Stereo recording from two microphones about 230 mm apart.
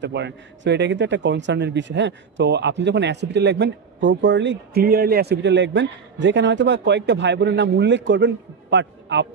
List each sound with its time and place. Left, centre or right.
0.0 s speech: right